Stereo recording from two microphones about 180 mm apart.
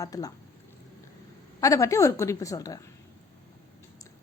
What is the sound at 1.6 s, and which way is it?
A woman's voice, 15° left (ahead or behind).